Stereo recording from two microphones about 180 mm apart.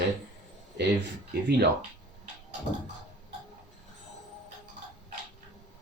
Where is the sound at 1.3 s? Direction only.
60° right (ahead or behind).